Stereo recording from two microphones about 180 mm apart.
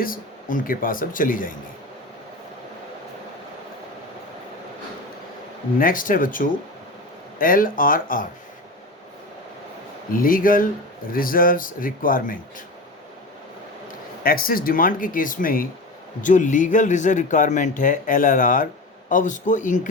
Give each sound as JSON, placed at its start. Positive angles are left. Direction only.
{"t": 0.0, "sound": "speech", "side_deg": 50}
{"t": 5.8, "sound": "speech", "side_deg": 50}
{"t": 10.1, "sound": "speech", "side_deg": 50}
{"t": 14.3, "sound": "speech", "side_deg": 55}